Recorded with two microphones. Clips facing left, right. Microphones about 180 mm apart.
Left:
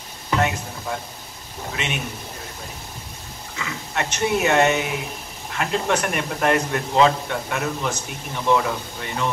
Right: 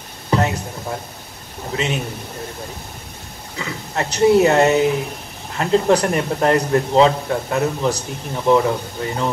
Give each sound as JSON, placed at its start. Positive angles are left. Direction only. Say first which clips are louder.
{"t": 0.3, "sound": "music", "louder": "right 3 dB", "side_deg": -35}
{"t": 1.7, "sound": "a man's voice", "louder": "right 7 dB", "side_deg": -30}
{"t": 3.5, "sound": "a man's voice", "louder": "right 3 dB", "side_deg": -35}